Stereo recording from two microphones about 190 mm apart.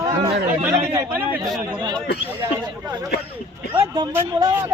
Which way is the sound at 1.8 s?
20° right (ahead or behind).